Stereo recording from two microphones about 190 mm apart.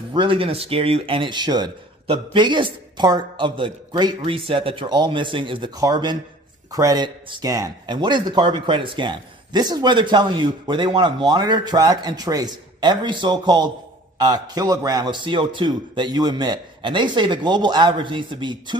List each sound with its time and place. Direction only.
0.1 s speech: 25° right (ahead or behind)